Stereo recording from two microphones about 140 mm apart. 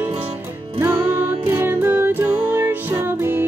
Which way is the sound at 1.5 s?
15° right (ahead or behind).